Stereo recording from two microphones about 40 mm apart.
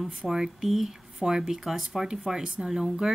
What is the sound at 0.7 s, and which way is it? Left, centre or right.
Speech, centre.